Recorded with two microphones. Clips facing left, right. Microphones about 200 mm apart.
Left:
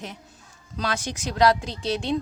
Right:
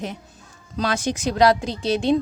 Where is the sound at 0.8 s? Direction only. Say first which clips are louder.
Right 5 dB; 20° right (ahead or behind).